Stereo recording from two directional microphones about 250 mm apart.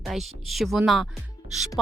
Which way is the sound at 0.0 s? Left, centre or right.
Centre.